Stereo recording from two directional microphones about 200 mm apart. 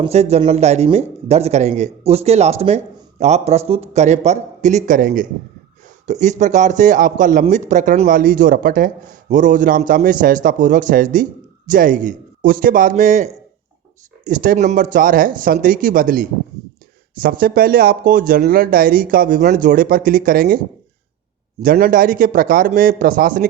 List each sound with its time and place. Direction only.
0.0 s a man's voice: 30° right (ahead or behind)
21.6 s speech: 45° right (ahead or behind)